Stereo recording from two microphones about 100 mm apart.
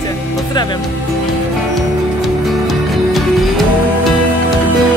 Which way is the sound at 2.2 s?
Centre (ahead or behind).